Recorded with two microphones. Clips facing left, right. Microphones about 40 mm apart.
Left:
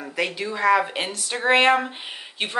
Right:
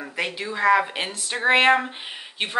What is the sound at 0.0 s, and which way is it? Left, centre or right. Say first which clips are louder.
Speech: left 2 dB; centre.